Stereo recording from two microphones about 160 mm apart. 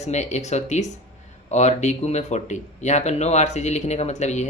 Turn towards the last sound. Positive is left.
turn(degrees=45)  # may be behind; listen again after turning